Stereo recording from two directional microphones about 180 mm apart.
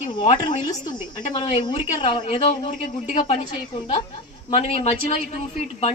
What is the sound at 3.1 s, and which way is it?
Speech, 40° left (ahead or behind).